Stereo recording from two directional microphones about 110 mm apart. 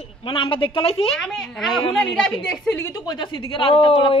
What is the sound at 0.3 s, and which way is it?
Speech, 50° left (ahead or behind).